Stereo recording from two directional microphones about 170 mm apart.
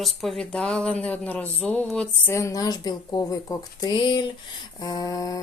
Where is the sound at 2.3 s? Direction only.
20° left (ahead or behind).